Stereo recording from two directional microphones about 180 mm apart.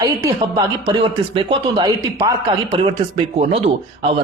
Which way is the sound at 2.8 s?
35° right (ahead or behind).